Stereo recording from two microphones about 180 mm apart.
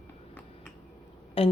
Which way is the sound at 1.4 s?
30° left (ahead or behind).